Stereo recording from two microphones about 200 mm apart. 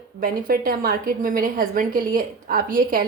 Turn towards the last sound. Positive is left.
turn(degrees=-45)  # may be behind; listen again after turning